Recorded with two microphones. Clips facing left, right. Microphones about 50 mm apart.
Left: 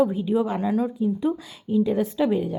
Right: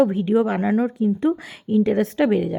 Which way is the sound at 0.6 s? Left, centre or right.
Right.